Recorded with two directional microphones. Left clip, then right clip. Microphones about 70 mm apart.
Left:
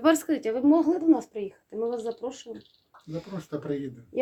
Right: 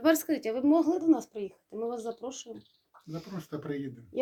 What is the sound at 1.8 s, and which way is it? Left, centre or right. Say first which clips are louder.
Speech: left 5 dB; left.